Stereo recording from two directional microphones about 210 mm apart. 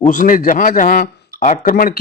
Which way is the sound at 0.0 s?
40° left (ahead or behind).